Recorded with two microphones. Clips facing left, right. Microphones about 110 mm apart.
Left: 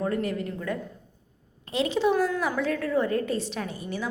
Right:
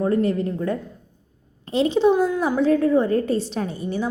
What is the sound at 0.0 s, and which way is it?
A woman's voice, 30° right (ahead or behind).